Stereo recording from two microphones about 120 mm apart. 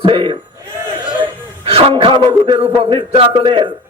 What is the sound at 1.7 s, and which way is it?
Speech, 50° right (ahead or behind).